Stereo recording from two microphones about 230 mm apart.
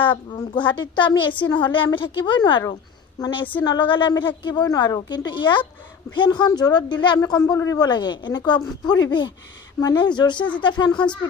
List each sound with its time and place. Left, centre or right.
0.0 s speech: left